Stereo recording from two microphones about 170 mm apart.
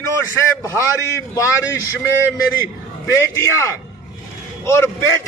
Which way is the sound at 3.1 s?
15° left (ahead or behind).